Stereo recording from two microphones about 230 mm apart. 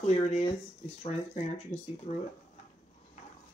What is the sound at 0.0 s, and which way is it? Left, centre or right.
Speech, left.